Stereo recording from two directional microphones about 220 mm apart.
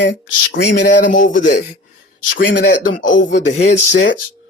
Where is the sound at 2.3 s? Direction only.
55° left (ahead or behind).